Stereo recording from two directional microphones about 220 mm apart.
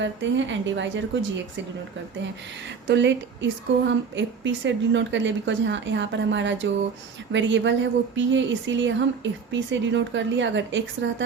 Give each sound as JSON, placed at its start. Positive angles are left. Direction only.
{"t": 0.0, "sound": "a woman's voice", "side_deg": -55}
{"t": 2.8, "sound": "a woman's voice", "side_deg": -55}